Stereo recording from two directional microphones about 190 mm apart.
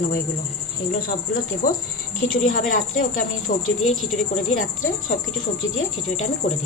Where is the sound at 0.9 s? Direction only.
45° left (ahead or behind).